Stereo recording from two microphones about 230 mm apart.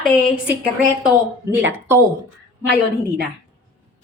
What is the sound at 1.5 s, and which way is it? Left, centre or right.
Speech, centre.